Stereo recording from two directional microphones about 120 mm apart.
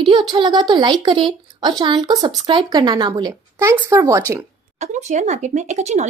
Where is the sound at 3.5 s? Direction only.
20° right (ahead or behind).